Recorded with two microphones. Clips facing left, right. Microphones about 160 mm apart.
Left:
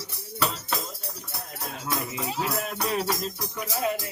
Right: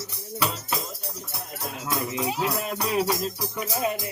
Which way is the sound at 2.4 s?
Centre (ahead or behind).